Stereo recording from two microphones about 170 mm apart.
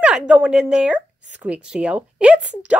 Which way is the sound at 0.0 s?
5° right (ahead or behind).